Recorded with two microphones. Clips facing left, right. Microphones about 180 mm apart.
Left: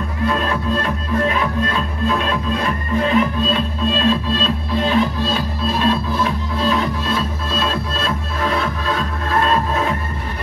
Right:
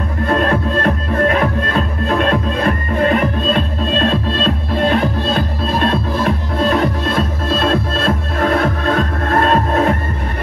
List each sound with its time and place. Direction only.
0.3 s music: 55° right (ahead or behind)